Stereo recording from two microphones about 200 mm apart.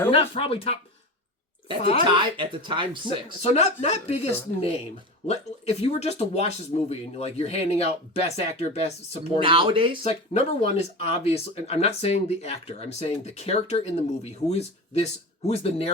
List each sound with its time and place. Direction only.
0.1 s speech: 25° left (ahead or behind)
1.8 s speech: 30° left (ahead or behind)
2.1 s speech: 25° right (ahead or behind)
3.4 s speech: 30° left (ahead or behind)
9.4 s speech: 25° right (ahead or behind)
10.0 s speech: 30° left (ahead or behind)